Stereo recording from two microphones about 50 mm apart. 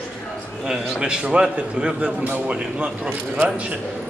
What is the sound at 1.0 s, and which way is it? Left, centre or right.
A man's voice, centre.